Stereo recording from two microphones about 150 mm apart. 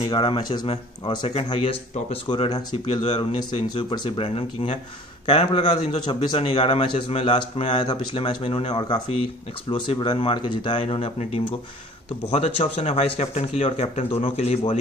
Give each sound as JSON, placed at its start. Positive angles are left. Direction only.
{"t": 0.1, "sound": "speech", "side_deg": 30}
{"t": 3.6, "sound": "a man's voice", "side_deg": 30}